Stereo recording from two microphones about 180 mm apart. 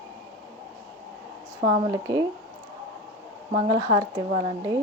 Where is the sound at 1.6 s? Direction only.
30° right (ahead or behind).